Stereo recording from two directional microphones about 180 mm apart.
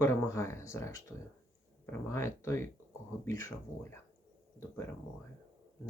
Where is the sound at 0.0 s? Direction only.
15° left (ahead or behind).